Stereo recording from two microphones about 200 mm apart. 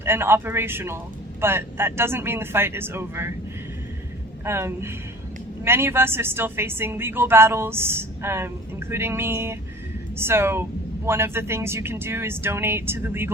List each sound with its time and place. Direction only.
0.0 s a woman's voice: 10° right (ahead or behind)
4.4 s a woman's voice: 15° right (ahead or behind)